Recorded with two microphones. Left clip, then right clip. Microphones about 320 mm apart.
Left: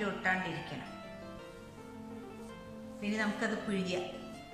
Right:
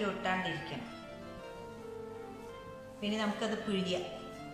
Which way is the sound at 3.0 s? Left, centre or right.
Centre.